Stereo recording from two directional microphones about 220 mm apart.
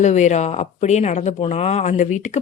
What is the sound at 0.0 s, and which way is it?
Speech, 30° left (ahead or behind).